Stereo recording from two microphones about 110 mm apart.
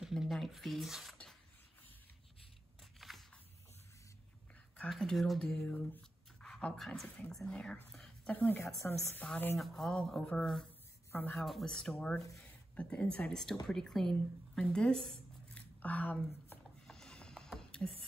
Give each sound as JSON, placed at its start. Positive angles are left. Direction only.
{"t": 0.0, "sound": "speech", "side_deg": 0}
{"t": 3.0, "sound": "a sound", "side_deg": 0}
{"t": 4.7, "sound": "speech", "side_deg": 5}
{"t": 7.9, "sound": "a sound", "side_deg": 10}
{"t": 8.8, "sound": "a woman's voice", "side_deg": 25}
{"t": 9.6, "sound": "speech", "side_deg": 5}
{"t": 11.1, "sound": "speech", "side_deg": 15}
{"t": 11.3, "sound": "speech", "side_deg": 5}
{"t": 16.8, "sound": "music", "side_deg": 5}